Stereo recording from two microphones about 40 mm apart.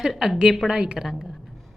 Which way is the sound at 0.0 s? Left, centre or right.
Centre.